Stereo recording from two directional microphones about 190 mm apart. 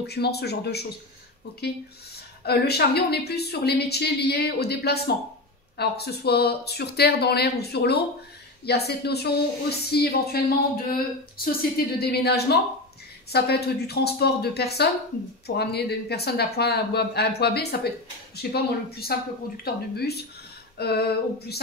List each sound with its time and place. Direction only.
0.0 s a woman's voice: 60° left (ahead or behind)
2.4 s a woman's voice: 60° left (ahead or behind)